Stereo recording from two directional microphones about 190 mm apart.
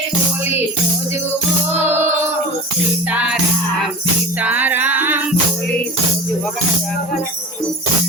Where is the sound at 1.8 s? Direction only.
10° right (ahead or behind).